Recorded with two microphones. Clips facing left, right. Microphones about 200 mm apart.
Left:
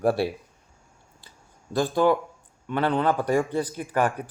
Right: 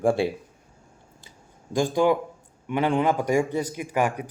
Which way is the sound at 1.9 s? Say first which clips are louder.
Left 1 dB; 15° right (ahead or behind).